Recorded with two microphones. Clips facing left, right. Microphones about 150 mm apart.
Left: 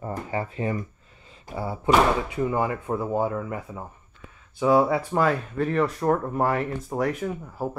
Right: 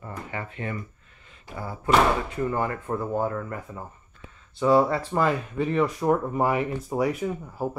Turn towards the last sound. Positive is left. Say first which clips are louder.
# right 1 dB
turn(degrees=0)  # may be behind; listen again after turning